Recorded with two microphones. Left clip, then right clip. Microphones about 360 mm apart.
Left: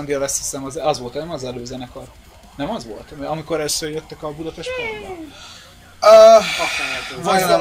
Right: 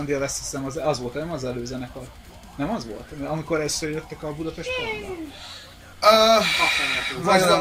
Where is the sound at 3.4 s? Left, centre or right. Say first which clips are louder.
Left 2 dB; left.